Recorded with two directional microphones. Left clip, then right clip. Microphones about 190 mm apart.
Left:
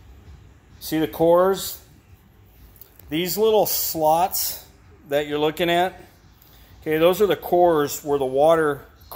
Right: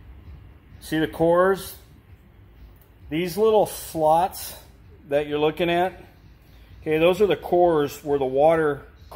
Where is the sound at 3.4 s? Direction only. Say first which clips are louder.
Even; 10° left (ahead or behind).